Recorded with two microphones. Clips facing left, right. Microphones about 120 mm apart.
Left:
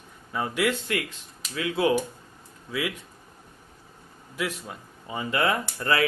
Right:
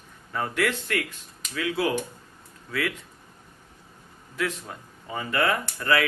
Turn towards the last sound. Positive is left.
turn(degrees=25)  # may be behind; listen again after turning